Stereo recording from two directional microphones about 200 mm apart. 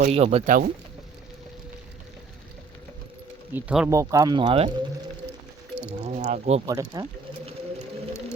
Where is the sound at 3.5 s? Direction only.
5° right (ahead or behind); by 4.7 s 25° right (ahead or behind).